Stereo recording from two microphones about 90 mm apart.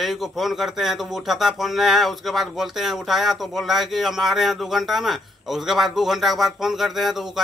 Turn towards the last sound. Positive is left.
turn(degrees=-5)  # may be behind; listen again after turning